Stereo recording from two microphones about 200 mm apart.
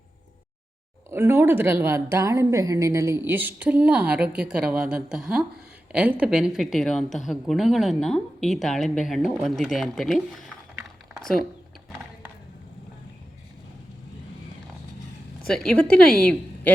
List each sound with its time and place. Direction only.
1.1 s a woman's voice: 10° right (ahead or behind)
15.4 s a woman's voice: 5° left (ahead or behind)